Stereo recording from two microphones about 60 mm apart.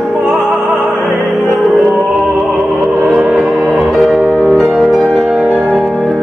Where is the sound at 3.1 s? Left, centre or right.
Centre.